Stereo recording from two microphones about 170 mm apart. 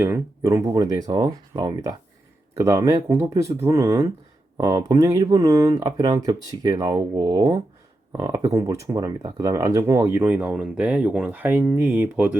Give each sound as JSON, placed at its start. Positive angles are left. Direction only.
{"t": 0.0, "sound": "speech", "side_deg": -15}